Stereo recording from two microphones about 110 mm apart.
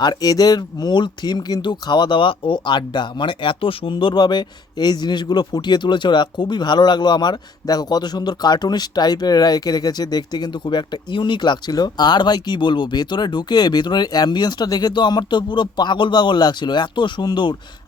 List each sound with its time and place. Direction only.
0.0 s speech: 40° left (ahead or behind)